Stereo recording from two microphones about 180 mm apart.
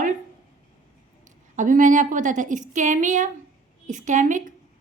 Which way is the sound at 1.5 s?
45° right (ahead or behind).